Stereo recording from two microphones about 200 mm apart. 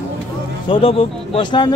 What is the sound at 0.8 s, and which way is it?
Speech, 30° left (ahead or behind).